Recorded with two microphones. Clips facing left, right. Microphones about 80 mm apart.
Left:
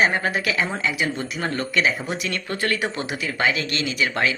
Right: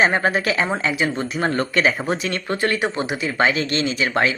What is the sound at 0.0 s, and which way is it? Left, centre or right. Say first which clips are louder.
Speech: right 3 dB; right.